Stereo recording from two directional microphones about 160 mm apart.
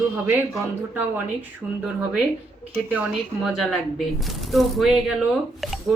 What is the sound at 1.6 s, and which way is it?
Speech, 10° right (ahead or behind).